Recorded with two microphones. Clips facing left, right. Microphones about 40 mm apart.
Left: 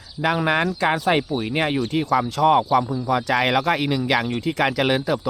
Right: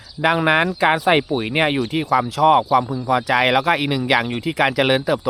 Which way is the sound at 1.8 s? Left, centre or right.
Centre.